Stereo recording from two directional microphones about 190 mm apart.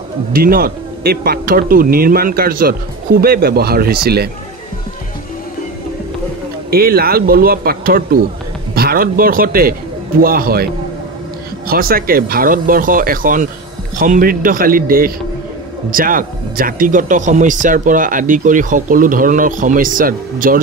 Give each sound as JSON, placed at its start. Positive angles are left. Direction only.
{"t": 0.3, "sound": "speech", "side_deg": -50}
{"t": 6.7, "sound": "speech", "side_deg": -55}